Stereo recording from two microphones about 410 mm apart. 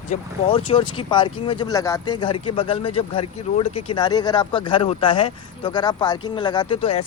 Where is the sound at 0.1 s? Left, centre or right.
Centre.